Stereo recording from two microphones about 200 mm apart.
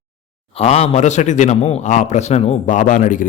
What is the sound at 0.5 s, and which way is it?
A man's voice, 30° left (ahead or behind).